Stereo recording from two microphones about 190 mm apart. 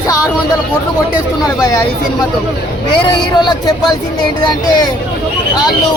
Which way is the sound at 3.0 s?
20° left (ahead or behind).